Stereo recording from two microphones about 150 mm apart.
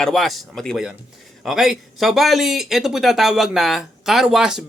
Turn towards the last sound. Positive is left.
turn(degrees=-5)  # may be behind; listen again after turning